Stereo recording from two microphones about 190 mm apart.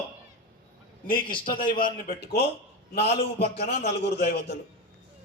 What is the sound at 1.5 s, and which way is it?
Speech, 45° left (ahead or behind).